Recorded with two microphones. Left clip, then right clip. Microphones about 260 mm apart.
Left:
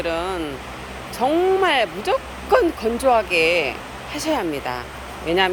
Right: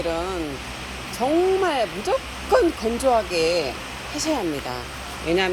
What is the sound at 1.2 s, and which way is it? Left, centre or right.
Speech, centre.